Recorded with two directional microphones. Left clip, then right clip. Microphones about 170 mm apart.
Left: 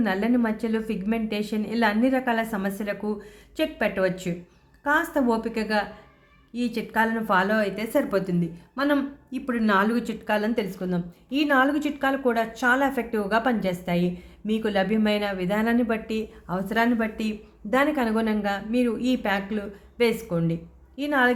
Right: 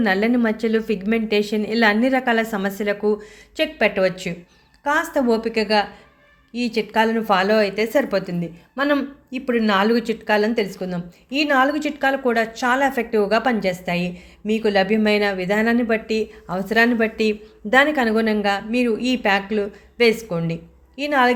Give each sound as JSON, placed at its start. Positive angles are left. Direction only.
{"t": 0.0, "sound": "a woman's voice", "side_deg": -15}